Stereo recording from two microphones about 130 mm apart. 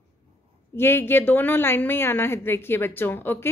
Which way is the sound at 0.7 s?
15° left (ahead or behind).